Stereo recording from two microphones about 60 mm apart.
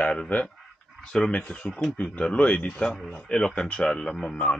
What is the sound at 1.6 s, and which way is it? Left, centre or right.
Speech, centre.